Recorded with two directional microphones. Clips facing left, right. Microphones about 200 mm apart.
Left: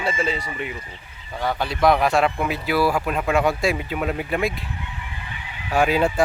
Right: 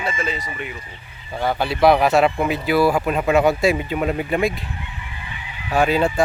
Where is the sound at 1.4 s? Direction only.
5° right (ahead or behind).